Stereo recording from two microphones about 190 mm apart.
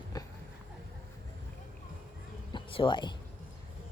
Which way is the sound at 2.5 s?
25° left (ahead or behind).